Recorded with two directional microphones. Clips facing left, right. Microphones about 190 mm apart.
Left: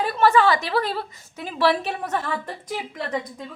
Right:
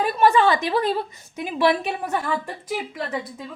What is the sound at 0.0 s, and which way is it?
A woman's voice, 15° right (ahead or behind).